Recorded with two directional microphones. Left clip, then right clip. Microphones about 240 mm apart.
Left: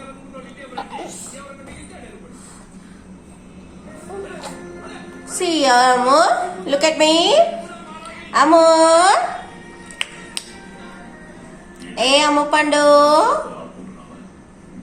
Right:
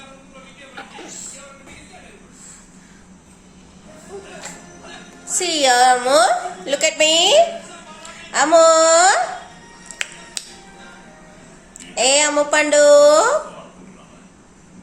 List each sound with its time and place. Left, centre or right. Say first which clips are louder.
5.4 s a woman's voice: even; centre
11.9 s a woman's voice: left 1 dB; centre